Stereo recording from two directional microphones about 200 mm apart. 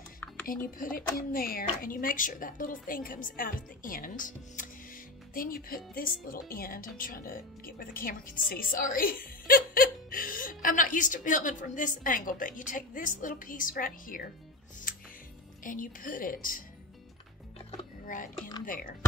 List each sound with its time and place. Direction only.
0.5 s speech: 45° left (ahead or behind)
14.9 s music: 45° left (ahead or behind)
15.6 s speech: 40° left (ahead or behind)
18.0 s speech: 45° left (ahead or behind)